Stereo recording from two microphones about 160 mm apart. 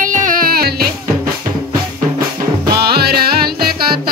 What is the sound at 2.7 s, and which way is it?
Music, 80° right.